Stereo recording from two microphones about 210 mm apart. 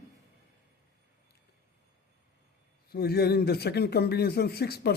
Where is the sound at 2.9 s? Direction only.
50° left (ahead or behind).